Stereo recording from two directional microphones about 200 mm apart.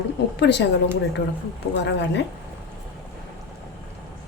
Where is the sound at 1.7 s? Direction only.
60° left (ahead or behind).